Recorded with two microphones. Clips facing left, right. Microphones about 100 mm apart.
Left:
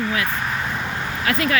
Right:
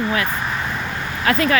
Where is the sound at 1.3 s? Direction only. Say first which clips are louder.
Right 4 dB; 40° right (ahead or behind).